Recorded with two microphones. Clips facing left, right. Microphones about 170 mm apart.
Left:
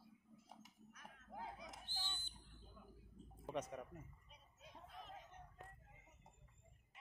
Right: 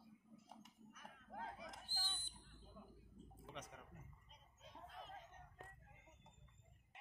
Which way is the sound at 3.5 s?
50° left (ahead or behind).